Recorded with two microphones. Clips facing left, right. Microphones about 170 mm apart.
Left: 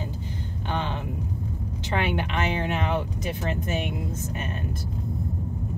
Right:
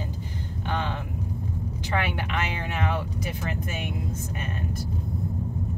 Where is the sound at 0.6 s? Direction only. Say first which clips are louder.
Left 1 dB; 20° left (ahead or behind).